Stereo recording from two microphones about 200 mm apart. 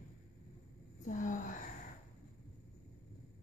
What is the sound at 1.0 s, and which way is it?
Gasp, 40° left (ahead or behind).